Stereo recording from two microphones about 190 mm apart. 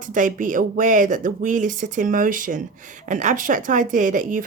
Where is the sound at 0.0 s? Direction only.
45° right (ahead or behind).